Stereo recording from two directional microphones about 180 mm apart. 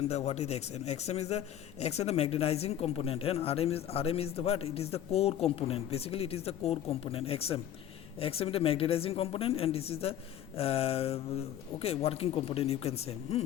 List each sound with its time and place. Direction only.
0.1 s a man's voice: 35° left (ahead or behind)